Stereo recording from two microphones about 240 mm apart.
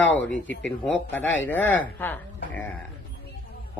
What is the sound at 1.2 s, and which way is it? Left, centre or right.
Speech, left.